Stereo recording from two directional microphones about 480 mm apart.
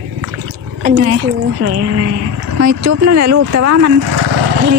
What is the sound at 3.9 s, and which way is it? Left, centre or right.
Dog, right.